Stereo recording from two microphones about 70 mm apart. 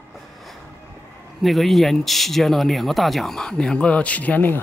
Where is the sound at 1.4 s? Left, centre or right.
Centre.